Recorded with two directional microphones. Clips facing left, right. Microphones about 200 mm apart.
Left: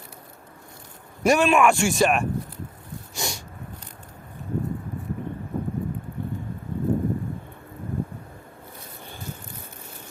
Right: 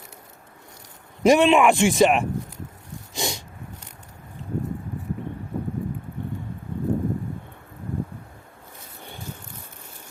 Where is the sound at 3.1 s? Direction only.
20° right (ahead or behind).